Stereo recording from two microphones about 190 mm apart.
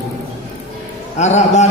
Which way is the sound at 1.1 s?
35° left (ahead or behind).